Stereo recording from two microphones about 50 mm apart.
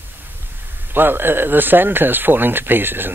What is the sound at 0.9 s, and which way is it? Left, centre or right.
Speech, right.